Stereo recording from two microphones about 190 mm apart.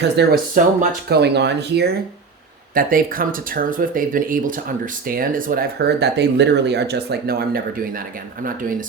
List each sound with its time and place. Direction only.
0.0 s speech: 60° right (ahead or behind)
2.7 s speech: 50° right (ahead or behind)